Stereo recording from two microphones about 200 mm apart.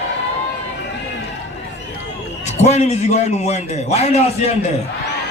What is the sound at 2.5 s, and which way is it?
A man's voice, 35° left (ahead or behind).